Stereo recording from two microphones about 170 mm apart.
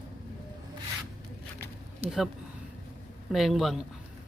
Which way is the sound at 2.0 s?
Centre (ahead or behind).